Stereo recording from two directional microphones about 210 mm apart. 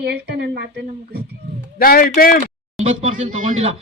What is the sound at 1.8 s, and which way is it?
Speech, 45° left (ahead or behind).